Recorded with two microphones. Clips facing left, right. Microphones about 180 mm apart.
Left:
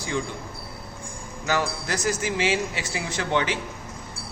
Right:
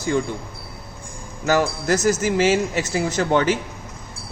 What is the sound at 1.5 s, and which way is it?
A man's voice, 45° right (ahead or behind).